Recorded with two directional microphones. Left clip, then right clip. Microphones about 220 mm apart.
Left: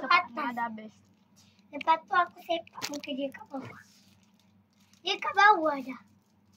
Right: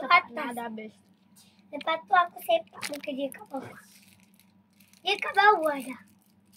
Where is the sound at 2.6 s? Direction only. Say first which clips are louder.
Right 1 dB; 10° left (ahead or behind).